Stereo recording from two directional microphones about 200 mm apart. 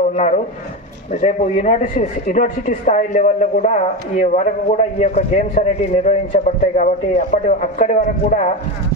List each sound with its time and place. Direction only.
0.1 s a man's voice: 35° left (ahead or behind)